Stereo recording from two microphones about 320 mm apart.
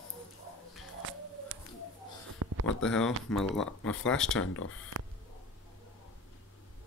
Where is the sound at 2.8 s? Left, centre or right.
Centre.